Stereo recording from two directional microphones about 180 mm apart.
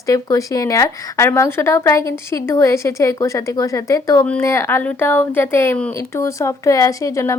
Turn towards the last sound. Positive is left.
turn(degrees=15)  # may be behind; listen again after turning